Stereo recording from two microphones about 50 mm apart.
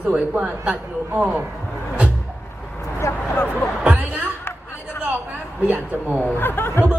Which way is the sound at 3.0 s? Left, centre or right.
Left.